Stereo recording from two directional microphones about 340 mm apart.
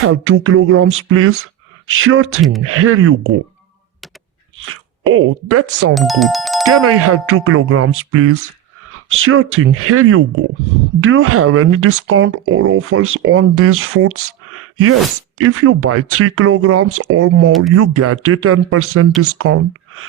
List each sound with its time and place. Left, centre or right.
0.0 s speech: right
4.5 s speech: right
5.9 s speech: centre
6.8 s speech: right